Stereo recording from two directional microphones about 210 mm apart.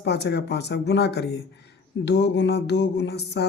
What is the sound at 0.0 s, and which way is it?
Speech, 55° left (ahead or behind).